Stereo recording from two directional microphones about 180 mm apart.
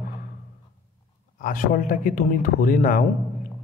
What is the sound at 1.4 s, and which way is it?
A man's voice, 50° left (ahead or behind).